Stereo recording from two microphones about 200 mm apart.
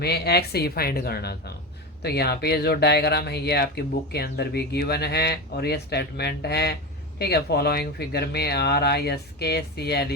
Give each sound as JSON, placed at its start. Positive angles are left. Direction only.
{"t": 0.0, "sound": "speech", "side_deg": 55}